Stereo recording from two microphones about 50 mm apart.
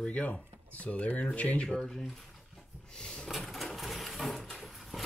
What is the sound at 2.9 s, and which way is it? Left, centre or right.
Drawer open or close, centre.